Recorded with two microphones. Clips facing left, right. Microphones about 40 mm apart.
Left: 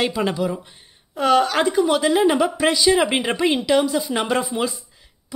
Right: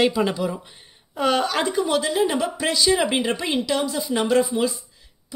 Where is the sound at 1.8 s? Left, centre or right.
Centre.